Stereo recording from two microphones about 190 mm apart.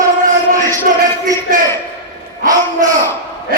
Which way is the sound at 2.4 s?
20° right (ahead or behind).